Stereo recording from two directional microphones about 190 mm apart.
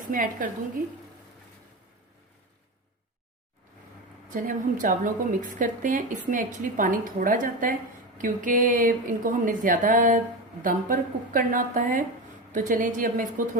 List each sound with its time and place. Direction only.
0.1 s a woman's voice: 45° right (ahead or behind)
4.4 s a woman's voice: 45° right (ahead or behind)